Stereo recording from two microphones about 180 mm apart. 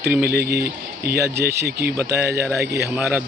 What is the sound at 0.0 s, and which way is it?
A man's voice, 60° right (ahead or behind).